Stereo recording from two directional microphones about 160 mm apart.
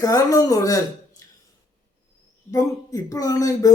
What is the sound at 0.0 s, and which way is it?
Speech, 20° left (ahead or behind).